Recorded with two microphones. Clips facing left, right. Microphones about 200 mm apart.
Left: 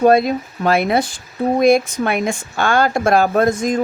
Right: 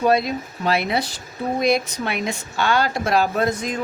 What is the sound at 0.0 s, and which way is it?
Speech, 50° left (ahead or behind).